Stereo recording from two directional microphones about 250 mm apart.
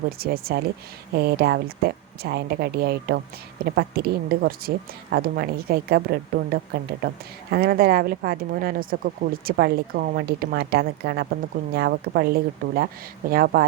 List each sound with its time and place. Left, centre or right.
0.2 s speech: right